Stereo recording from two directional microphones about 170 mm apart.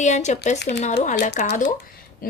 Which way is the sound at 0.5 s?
80° left.